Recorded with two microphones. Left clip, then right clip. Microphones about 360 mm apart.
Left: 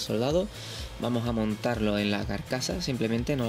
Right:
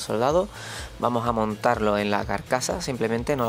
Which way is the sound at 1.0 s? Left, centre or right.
Right.